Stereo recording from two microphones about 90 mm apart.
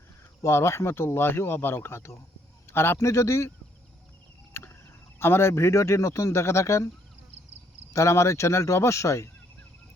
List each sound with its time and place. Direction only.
0.4 s speech: 30° left (ahead or behind)
4.5 s a sound: 25° left (ahead or behind)
5.2 s speech: 25° left (ahead or behind)
7.9 s speech: 35° left (ahead or behind)